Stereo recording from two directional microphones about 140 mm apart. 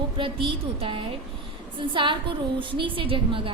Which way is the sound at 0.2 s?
40° right (ahead or behind).